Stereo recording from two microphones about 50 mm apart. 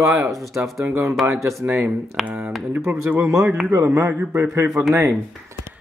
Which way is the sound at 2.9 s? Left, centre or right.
Right.